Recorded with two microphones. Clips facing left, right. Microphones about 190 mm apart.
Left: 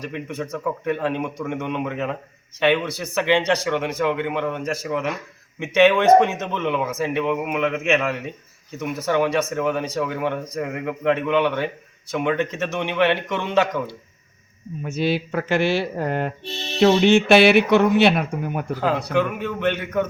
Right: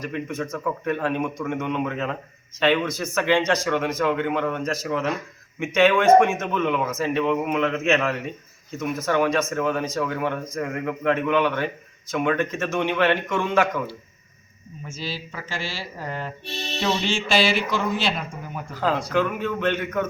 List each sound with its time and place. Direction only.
0.0 s a man's voice: 15° left (ahead or behind)
14.8 s speech: 65° left (ahead or behind)
19.1 s speech: 15° left (ahead or behind)